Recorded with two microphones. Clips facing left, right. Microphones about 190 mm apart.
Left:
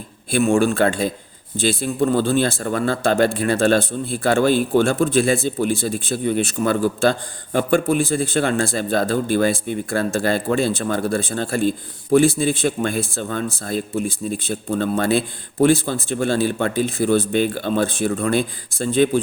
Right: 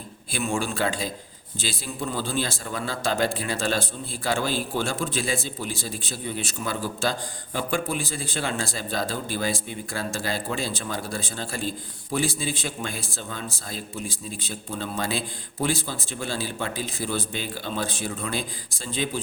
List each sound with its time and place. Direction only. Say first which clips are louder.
0.3 s a man's voice: left 11 dB; 50° left (ahead or behind)